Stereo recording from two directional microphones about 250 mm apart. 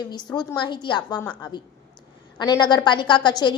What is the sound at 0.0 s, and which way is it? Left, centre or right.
A woman's voice, centre.